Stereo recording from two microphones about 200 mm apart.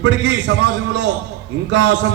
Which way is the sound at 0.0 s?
60° right (ahead or behind).